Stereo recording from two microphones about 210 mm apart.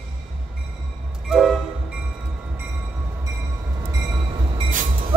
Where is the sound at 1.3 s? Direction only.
Centre (ahead or behind).